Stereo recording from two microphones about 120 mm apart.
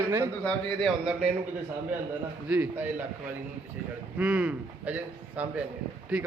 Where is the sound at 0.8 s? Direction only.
5° right (ahead or behind).